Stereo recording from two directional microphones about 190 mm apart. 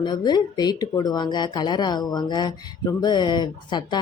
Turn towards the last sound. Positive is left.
turn(degrees=25)  # may be behind; listen again after turning